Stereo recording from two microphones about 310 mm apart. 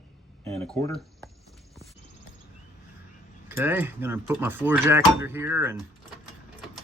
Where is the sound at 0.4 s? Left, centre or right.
Centre.